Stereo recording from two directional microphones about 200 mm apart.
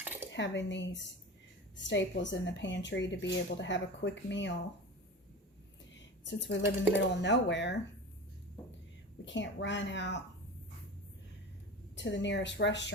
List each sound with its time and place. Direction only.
0.0 s a sound: 10° right (ahead or behind)
0.3 s a woman's voice: 65° left (ahead or behind)
5.9 s a sound: 65° left (ahead or behind)
7.1 s a woman's voice: 60° left (ahead or behind)
9.2 s a woman's voice: 65° left (ahead or behind)
11.9 s a woman's voice: 65° left (ahead or behind)